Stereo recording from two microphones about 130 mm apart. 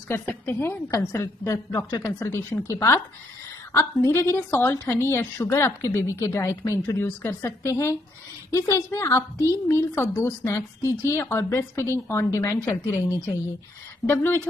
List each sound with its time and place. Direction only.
0.1 s a woman's voice: 15° left (ahead or behind)
14.0 s a woman's voice: 20° left (ahead or behind)